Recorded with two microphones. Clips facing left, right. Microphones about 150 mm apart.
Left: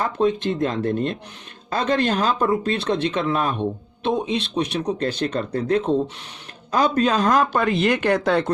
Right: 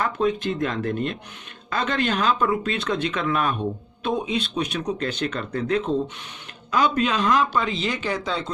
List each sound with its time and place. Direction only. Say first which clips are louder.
0.0 s speech: left 2 dB; 30° left (ahead or behind); by 8.5 s 60° left (ahead or behind)